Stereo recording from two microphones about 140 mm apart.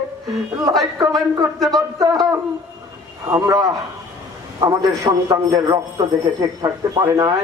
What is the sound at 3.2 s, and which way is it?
Speech, 20° right (ahead or behind).